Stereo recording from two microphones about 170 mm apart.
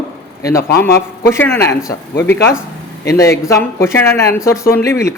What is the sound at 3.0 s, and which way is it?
Speech, 20° left (ahead or behind).